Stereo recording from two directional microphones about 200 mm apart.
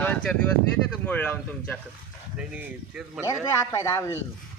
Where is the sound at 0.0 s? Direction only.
5° left (ahead or behind).